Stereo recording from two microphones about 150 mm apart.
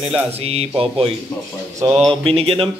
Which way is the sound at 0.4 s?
40° right (ahead or behind).